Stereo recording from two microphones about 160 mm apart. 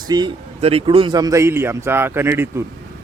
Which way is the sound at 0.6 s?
35° right (ahead or behind).